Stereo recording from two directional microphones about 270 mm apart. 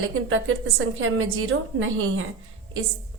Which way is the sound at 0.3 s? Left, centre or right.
Right.